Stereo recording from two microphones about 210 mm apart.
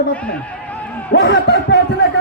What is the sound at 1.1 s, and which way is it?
Speech, 55° left (ahead or behind).